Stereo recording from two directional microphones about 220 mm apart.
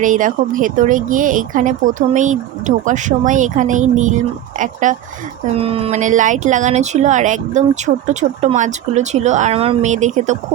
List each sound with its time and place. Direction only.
0.0 s speech: 35° right (ahead or behind)